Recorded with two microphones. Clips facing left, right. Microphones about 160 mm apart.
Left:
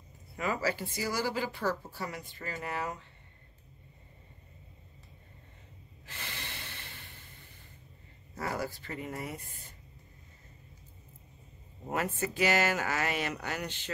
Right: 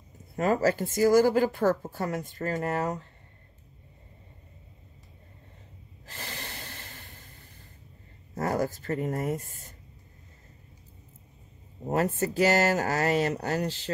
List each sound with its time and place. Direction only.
0.4 s speech: 45° right (ahead or behind)
6.0 s snort: 40° right (ahead or behind)
8.4 s speech: 45° right (ahead or behind)
11.9 s speech: 40° right (ahead or behind)